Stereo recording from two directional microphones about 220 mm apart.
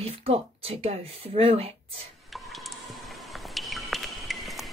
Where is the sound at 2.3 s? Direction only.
Centre (ahead or behind).